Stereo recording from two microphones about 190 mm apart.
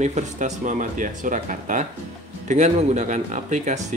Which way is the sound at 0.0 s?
40° right (ahead or behind).